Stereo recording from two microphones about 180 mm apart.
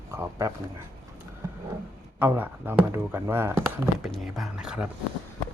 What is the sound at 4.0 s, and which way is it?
Speech, centre (ahead or behind).